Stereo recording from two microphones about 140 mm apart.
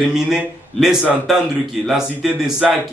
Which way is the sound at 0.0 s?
5° right (ahead or behind).